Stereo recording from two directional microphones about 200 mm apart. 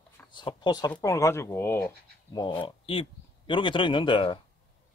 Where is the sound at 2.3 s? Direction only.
20° left (ahead or behind).